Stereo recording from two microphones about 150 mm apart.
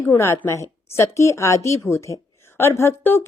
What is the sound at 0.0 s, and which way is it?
A woman's voice, 15° left (ahead or behind).